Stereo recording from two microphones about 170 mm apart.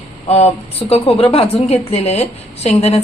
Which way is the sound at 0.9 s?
35° left (ahead or behind).